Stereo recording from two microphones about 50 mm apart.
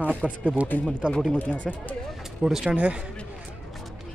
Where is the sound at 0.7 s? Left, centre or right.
Left.